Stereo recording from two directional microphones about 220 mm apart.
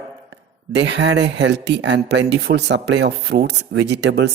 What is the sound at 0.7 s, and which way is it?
Speech, 55° right (ahead or behind).